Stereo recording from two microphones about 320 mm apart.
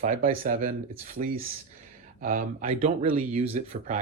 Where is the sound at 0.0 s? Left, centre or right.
Right.